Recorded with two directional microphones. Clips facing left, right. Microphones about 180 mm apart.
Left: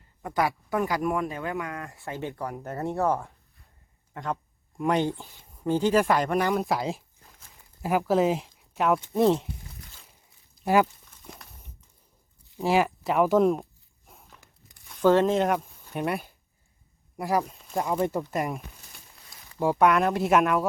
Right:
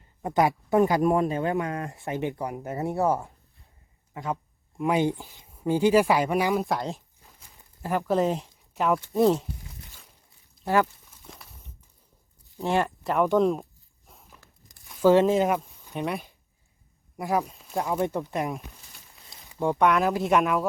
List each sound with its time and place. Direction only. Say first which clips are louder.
0.2 s speech: right 4 dB; 25° right (ahead or behind)
4.1 s speech: right 1 dB; 5° right (ahead or behind)
5.0 s speech: right 3 dB; 15° right (ahead or behind); by 9.5 s centre (ahead or behind)
10.6 s speech: left 2 dB; 15° left (ahead or behind)
12.5 s speech: left 2 dB; centre (ahead or behind)
14.1 s walk: even; centre (ahead or behind)
14.8 s a sound: right 1 dB; centre (ahead or behind)
15.1 s speech: right 2 dB; 5° right (ahead or behind)